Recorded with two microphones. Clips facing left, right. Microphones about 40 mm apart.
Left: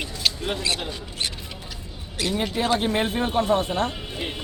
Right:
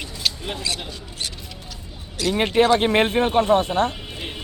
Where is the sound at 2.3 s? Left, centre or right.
Right.